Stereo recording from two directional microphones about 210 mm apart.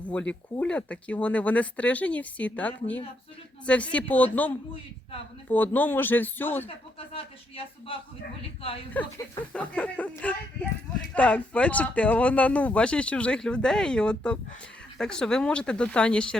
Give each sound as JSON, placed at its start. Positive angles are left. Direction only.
{"t": 0.0, "sound": "speech", "side_deg": 5}
{"t": 6.7, "sound": "speech", "side_deg": 25}
{"t": 8.9, "sound": "speech", "side_deg": 10}